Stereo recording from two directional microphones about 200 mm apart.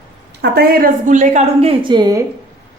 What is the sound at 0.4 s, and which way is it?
A woman's voice, 50° right (ahead or behind).